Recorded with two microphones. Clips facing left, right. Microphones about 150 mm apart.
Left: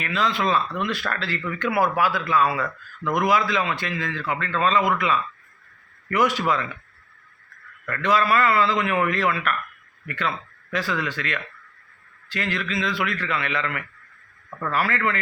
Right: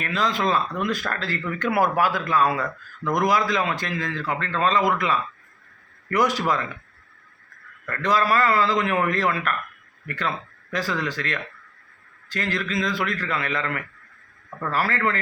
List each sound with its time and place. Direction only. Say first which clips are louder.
0.0 s speech: even; 40° right (ahead or behind)
7.9 s speech: left 1 dB; 40° right (ahead or behind)